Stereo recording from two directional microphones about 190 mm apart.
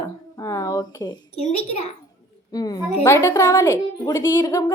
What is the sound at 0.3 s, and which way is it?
Speech, 20° left (ahead or behind).